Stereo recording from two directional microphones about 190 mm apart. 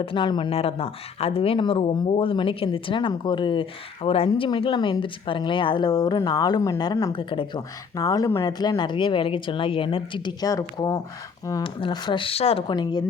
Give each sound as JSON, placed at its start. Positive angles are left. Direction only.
{"t": 0.0, "sound": "speech", "side_deg": 25}